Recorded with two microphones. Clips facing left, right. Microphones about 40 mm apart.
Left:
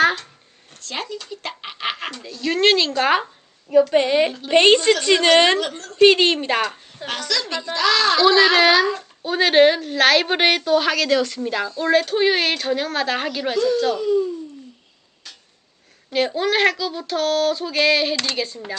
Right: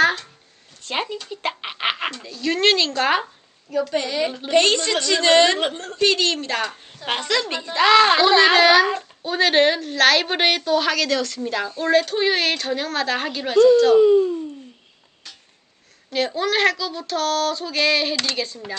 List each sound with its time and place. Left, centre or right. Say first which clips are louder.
0.0 s a sound: left 1 dB; centre
0.8 s a sound: right 3 dB; right
2.1 s speech: left 1 dB; centre
3.9 s a woman's voice: left 6 dB; left
5.5 s speech: right 1 dB; right
6.0 s a woman's voice: left 6 dB; left
7.1 s a woman's voice: right 2 dB; right
8.2 s speech: even; centre
8.5 s speech: right 1 dB; centre
13.9 s speech: right 7 dB; right
16.0 s speech: left 2 dB; centre